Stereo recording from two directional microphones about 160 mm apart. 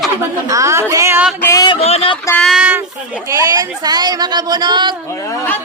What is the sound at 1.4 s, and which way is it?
Speech, 20° left (ahead or behind).